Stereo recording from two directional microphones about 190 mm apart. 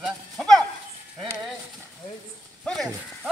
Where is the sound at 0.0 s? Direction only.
Centre (ahead or behind).